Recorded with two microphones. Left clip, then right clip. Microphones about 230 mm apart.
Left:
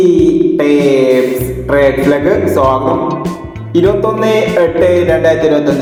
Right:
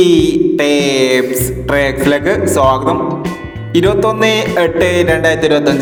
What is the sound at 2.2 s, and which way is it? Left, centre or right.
Music, right.